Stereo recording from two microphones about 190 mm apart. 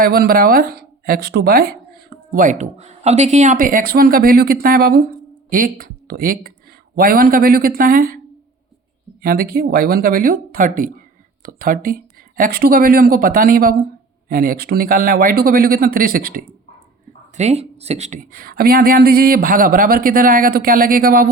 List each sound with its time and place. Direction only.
0.0 s speech: 50° right (ahead or behind)
9.2 s speech: 50° right (ahead or behind)
17.3 s speech: 35° right (ahead or behind)